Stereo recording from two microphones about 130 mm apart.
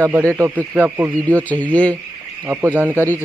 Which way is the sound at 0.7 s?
10° right (ahead or behind).